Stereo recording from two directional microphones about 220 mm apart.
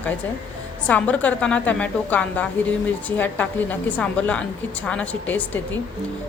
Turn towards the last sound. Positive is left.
turn(degrees=5)  # may be behind; listen again after turning